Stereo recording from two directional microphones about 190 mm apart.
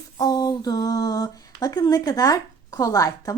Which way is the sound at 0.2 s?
20° left (ahead or behind).